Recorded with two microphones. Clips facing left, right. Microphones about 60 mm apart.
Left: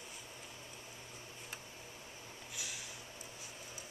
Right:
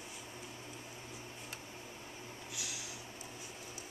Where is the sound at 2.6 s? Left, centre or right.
Centre.